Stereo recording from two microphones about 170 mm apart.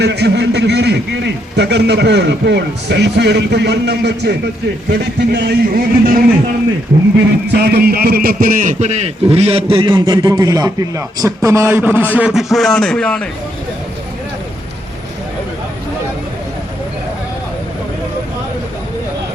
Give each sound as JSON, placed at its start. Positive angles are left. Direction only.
{"t": 0.0, "sound": "a man's voice", "side_deg": -80}
{"t": 7.4, "sound": "a man's voice", "side_deg": -75}